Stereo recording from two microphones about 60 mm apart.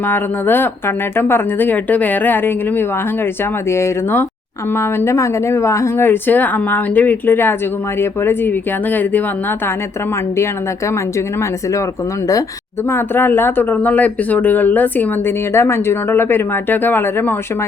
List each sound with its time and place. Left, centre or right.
0.1 s a woman's voice: left
3.7 s speech: left
6.1 s a woman's voice: left
12.9 s speech: left
15.5 s a woman's voice: left